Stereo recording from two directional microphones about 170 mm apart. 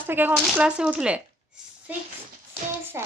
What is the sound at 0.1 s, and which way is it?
Speech, 10° right (ahead or behind).